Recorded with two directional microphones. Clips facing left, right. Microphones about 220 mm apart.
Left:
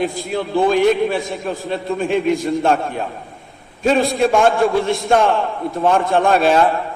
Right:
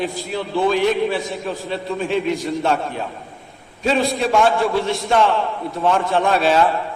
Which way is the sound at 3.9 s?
50° left (ahead or behind).